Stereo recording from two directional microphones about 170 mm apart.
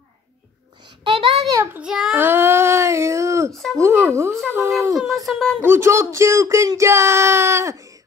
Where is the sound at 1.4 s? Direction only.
15° right (ahead or behind).